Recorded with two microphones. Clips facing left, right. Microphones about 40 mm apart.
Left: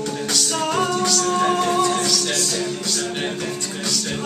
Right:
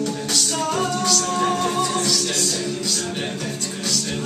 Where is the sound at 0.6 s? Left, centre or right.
Centre.